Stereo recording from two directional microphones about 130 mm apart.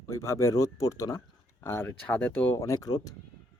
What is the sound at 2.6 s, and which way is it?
Speech, 25° left (ahead or behind).